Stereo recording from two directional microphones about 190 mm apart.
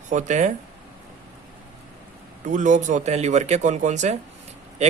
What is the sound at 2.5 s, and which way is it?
Speech, 40° right (ahead or behind).